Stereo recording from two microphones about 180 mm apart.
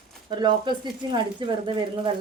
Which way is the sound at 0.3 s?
25° right (ahead or behind).